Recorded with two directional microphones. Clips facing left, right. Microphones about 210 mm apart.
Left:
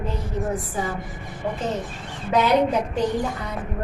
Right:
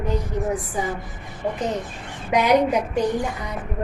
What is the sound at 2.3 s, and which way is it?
Speech, 15° right (ahead or behind).